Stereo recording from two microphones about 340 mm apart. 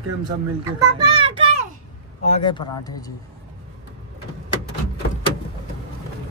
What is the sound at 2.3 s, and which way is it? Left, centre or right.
Speech, centre.